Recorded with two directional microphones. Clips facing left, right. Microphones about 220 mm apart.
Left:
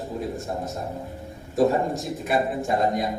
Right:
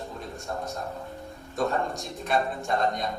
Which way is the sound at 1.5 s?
Centre (ahead or behind).